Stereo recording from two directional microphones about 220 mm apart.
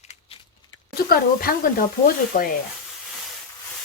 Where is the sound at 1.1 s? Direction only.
40° left (ahead or behind).